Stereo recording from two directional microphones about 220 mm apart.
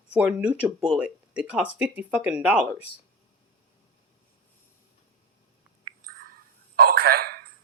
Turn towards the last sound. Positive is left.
turn(degrees=-40)  # may be behind; listen again after turning